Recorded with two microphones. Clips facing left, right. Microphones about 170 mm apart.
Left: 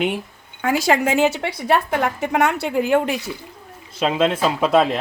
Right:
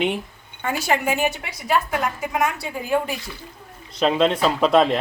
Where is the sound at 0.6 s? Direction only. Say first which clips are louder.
Left 4 dB; 90° left.